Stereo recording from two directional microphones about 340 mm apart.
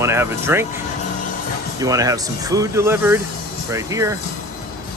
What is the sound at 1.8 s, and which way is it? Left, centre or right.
Speech, centre.